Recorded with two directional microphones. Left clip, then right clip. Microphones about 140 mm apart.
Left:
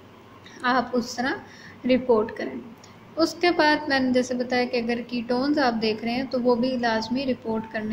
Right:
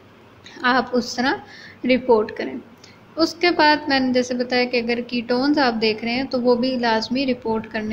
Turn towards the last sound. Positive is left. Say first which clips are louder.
# right 5 dB
turn(degrees=-5)  # may be behind; listen again after turning